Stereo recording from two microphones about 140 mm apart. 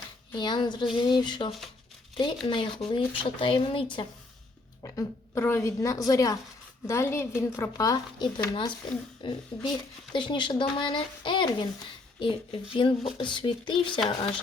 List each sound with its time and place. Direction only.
0.3 s speech: 35° left (ahead or behind)
4.8 s speech: 20° left (ahead or behind)
12.7 s speech: 40° left (ahead or behind)